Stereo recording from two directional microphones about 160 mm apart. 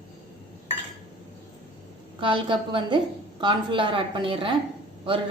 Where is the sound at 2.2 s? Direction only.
30° right (ahead or behind).